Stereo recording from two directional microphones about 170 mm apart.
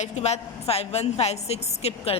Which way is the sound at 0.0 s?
40° left (ahead or behind).